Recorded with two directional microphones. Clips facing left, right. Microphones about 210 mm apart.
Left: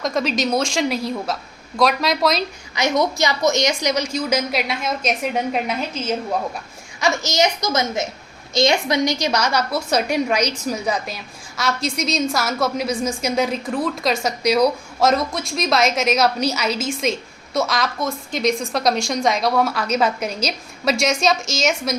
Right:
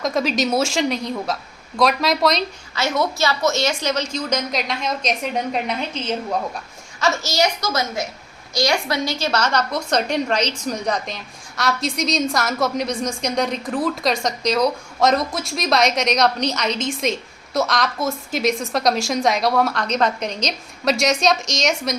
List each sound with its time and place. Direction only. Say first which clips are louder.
0.0 s a woman's voice: right 1 dB; centre (ahead or behind)
2.7 s a woman's voice: left 2 dB; 15° left (ahead or behind)
7.0 s a child's voice: left 1 dB; 15° left (ahead or behind); by 21.9 s centre (ahead or behind)